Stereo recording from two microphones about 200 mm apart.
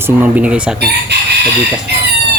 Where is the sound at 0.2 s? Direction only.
5° right (ahead or behind).